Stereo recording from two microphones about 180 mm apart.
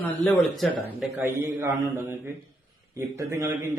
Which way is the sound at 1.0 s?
10° right (ahead or behind).